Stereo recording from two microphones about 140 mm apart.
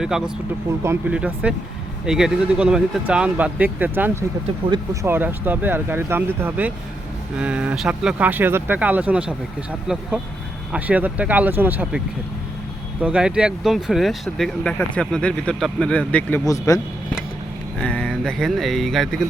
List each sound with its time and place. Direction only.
0.0 s speech: 5° right (ahead or behind)
0.8 s speech: 20° right (ahead or behind)
1.1 s speech: 10° right (ahead or behind)
10.7 s speech: 10° right (ahead or behind); by 16.4 s 10° left (ahead or behind)
16.5 s speech: 25° left (ahead or behind)
17.7 s speech: 5° left (ahead or behind)